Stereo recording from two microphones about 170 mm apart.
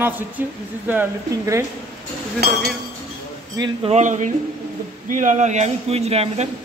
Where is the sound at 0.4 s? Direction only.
10° right (ahead or behind).